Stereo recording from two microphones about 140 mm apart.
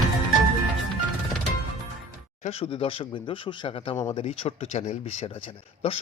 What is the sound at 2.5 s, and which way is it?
A man's voice, 45° left (ahead or behind).